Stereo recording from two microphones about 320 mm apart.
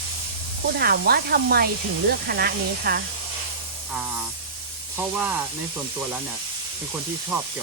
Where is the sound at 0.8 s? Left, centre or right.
Right.